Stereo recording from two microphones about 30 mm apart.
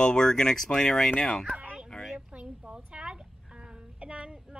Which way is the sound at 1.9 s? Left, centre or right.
Centre.